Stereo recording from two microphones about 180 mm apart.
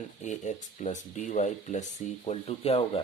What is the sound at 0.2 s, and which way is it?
Speech, 40° left (ahead or behind).